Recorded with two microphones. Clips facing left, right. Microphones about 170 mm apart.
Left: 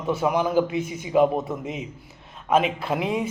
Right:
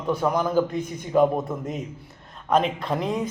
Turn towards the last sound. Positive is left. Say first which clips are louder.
# left 1 dB
turn(degrees=5)  # may be behind; listen again after turning